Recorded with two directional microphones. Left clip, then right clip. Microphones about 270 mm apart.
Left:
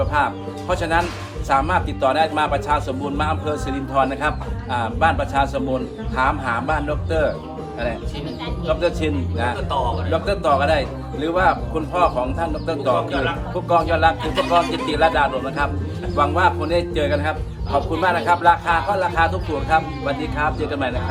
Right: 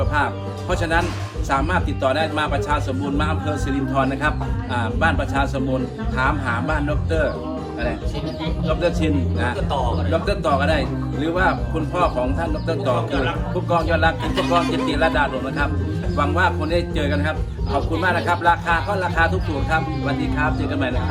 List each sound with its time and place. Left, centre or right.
0.1 s a man's voice: centre
8.6 s a man's voice: centre